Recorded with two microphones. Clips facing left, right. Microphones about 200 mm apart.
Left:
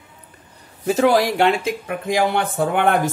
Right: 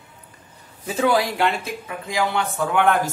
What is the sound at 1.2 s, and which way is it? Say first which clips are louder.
A man's voice: left 5 dB; 85° left.